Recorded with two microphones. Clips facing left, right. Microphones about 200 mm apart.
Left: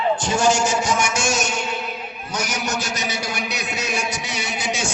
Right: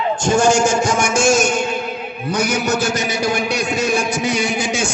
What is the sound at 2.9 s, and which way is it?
A man's voice, 50° right (ahead or behind).